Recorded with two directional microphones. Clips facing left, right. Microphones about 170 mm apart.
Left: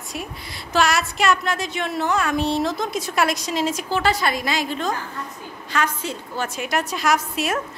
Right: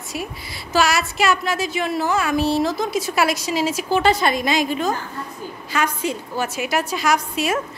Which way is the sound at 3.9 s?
20° right (ahead or behind).